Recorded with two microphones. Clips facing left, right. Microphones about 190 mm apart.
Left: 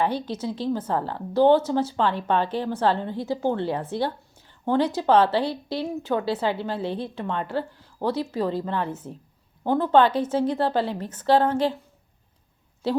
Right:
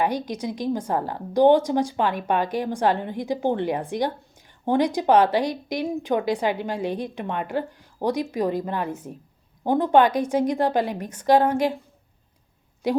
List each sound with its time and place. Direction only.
0.0 s a woman's voice: 15° right (ahead or behind)
12.8 s a woman's voice: 15° right (ahead or behind)